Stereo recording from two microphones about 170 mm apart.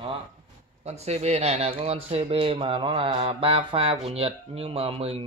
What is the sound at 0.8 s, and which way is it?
Speech, 40° right (ahead or behind).